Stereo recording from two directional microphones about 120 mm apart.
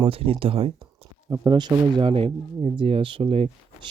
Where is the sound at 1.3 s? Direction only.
35° right (ahead or behind).